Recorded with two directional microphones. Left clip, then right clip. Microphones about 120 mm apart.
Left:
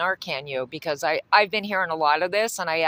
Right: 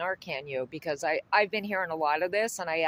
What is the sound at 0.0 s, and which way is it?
Speech, 25° left (ahead or behind).